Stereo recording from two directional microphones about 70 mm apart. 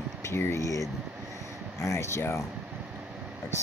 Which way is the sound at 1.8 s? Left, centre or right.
Left.